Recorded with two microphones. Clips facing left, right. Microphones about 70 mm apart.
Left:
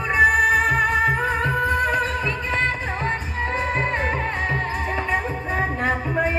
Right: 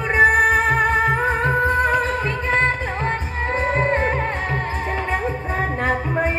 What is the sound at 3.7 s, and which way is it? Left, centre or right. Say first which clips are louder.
Music: right 4 dB; right.